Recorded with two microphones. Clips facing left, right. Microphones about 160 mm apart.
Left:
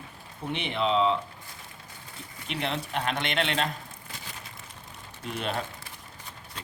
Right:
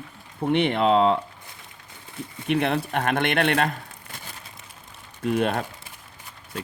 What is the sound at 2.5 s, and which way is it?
Speech, 55° right (ahead or behind).